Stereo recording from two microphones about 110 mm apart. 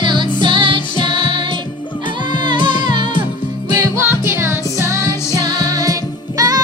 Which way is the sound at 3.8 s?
20° right (ahead or behind).